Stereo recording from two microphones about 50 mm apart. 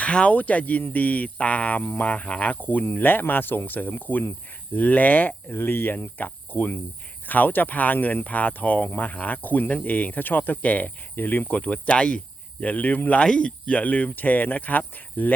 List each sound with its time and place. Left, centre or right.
0.0 s speech: left
5.5 s cricket: left
7.3 s speech: left
11.1 s speech: left
12.6 s speech: left
13.2 s speech: centre; by 15.3 s left